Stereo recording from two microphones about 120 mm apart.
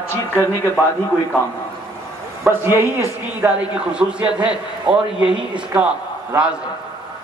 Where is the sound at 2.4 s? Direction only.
20° right (ahead or behind).